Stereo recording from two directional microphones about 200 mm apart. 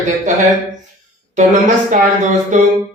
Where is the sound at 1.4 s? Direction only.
40° right (ahead or behind).